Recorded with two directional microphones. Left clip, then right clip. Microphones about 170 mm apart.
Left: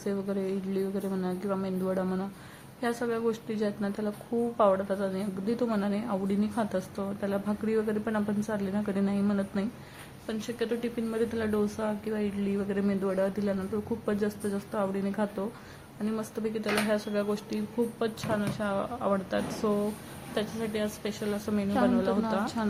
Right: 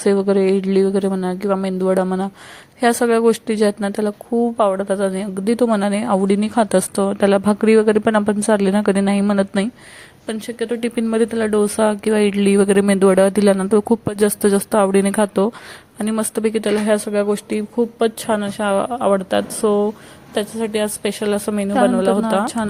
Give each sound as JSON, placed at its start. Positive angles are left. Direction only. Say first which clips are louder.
{"t": 0.0, "sound": "a woman's voice", "louder": "right 17 dB", "side_deg": -55}